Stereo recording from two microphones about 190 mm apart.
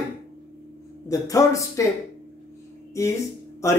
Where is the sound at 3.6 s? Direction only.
15° left (ahead or behind).